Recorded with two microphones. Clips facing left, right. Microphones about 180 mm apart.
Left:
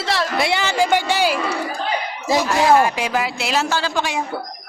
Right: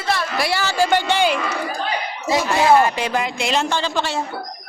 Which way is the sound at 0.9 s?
10° left (ahead or behind).